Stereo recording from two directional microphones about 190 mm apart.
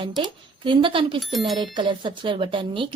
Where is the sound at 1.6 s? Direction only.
25° right (ahead or behind).